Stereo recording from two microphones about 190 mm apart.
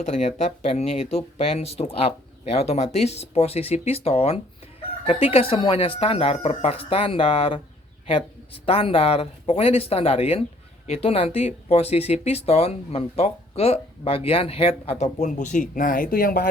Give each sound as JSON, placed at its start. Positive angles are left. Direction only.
{"t": 0.0, "sound": "speech", "side_deg": 35}